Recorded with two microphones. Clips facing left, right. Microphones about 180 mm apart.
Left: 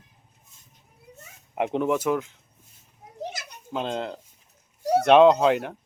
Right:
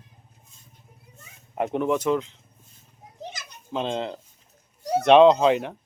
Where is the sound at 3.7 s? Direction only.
5° left (ahead or behind).